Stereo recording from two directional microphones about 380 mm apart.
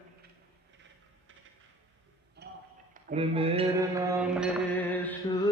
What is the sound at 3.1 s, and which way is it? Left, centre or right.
Mantra, centre.